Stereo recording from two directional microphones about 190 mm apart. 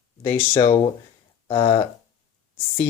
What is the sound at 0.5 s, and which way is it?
Speech, 30° left (ahead or behind).